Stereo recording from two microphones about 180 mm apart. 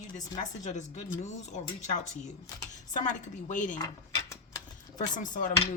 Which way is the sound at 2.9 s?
45° left (ahead or behind).